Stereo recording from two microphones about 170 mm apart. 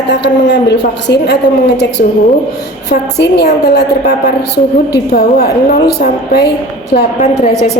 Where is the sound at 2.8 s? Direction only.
75° left (ahead or behind).